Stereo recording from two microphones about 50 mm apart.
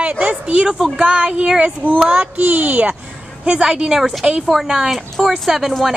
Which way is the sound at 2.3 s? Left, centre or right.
Right.